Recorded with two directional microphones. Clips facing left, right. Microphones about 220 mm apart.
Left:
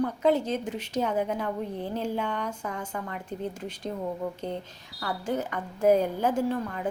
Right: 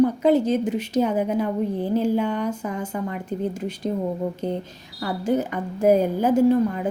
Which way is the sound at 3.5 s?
10° right (ahead or behind).